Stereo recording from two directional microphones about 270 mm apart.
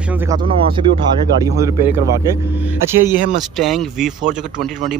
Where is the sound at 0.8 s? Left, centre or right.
Centre.